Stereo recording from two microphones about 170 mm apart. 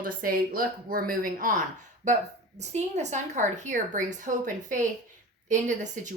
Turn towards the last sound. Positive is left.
turn(degrees=-50)  # may be behind; listen again after turning